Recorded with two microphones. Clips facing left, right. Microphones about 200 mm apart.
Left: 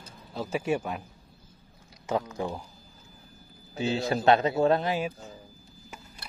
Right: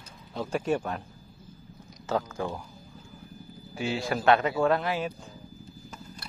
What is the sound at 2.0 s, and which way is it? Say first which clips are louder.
Speech: even; 20° left (ahead or behind).